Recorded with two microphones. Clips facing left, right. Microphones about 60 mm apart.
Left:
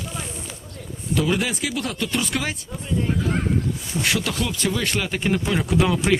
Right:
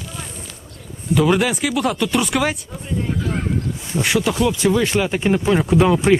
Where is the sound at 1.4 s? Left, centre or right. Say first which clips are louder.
Right 6 dB; right.